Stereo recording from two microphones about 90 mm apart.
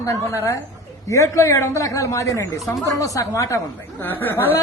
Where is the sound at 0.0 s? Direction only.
35° left (ahead or behind).